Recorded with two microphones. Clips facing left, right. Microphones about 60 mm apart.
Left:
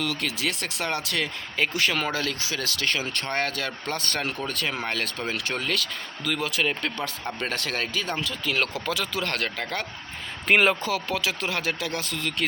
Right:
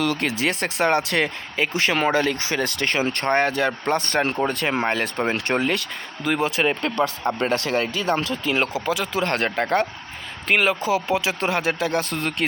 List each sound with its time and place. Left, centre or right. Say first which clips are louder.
0.2 s speech: right 6 dB; right
3.4 s speech: right 8 dB; right
5.5 s speech: right 5 dB; right
8.4 s speech: right 3 dB; right
10.5 s speech: even; centre
10.8 s speech: right 5 dB; centre; by 12.5 s right